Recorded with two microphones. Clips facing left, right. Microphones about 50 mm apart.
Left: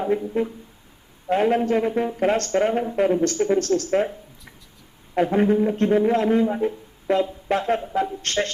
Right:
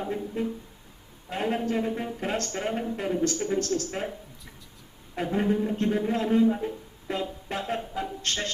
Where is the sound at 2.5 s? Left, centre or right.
Left.